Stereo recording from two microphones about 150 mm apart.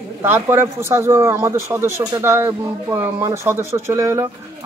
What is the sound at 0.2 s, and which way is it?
Speech, 20° right (ahead or behind).